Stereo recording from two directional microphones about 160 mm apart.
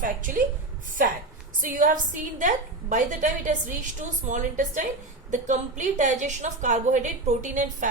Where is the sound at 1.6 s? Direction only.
55° right (ahead or behind).